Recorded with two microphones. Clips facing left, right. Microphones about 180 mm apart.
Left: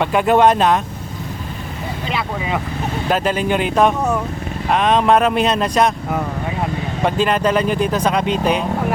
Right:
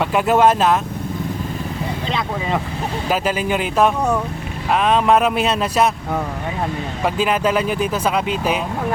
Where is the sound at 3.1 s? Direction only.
5° right (ahead or behind).